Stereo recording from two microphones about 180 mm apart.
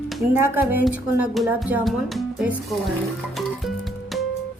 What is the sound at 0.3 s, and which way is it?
Speech, 10° right (ahead or behind).